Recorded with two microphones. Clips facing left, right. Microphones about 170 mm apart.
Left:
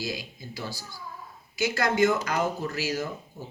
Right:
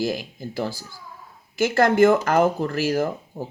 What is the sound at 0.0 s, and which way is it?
Speech, 50° right (ahead or behind).